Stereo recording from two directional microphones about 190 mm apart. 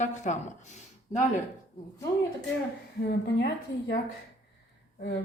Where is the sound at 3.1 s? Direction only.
60° left (ahead or behind).